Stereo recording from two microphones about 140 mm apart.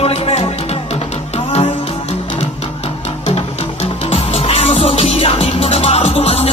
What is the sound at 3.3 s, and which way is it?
Music, 45° left (ahead or behind).